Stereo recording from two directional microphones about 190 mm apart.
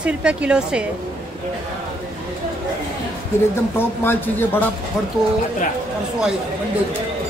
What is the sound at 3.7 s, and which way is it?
Speech, 10° left (ahead or behind).